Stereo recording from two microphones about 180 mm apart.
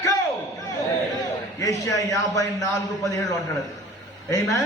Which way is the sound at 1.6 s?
20° left (ahead or behind).